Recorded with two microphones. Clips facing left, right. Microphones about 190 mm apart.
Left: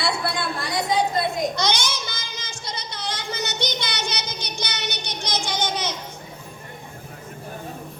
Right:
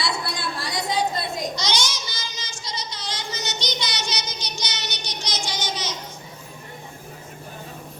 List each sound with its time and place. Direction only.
0.0 s chatter: 55° left (ahead or behind)
1.5 s child singing: 55° left (ahead or behind)